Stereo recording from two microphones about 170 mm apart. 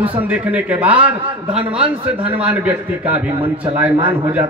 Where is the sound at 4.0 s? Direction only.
30° right (ahead or behind).